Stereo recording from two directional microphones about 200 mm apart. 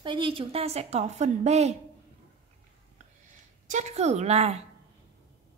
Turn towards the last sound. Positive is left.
turn(degrees=-30)  # may be behind; listen again after turning